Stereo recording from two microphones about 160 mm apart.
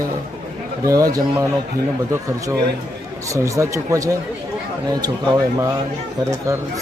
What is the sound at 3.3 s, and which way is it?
Speech, 20° right (ahead or behind).